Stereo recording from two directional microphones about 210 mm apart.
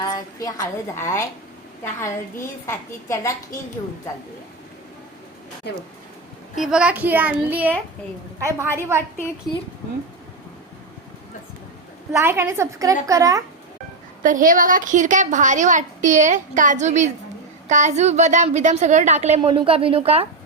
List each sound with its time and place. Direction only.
0.0 s a woman's voice: 20° left (ahead or behind)
6.6 s a woman's voice: 5° right (ahead or behind)
12.2 s a woman's voice: 10° right (ahead or behind)
14.2 s a woman's voice: 40° right (ahead or behind)